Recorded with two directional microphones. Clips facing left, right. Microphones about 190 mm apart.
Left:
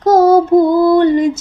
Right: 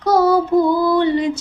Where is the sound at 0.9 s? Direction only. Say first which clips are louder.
Left 6 dB; 45° left (ahead or behind).